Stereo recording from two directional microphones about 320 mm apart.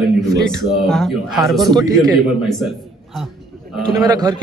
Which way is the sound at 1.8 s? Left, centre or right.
Centre.